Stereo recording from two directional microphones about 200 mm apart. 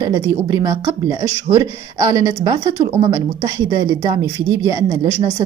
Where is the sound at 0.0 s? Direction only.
15° right (ahead or behind).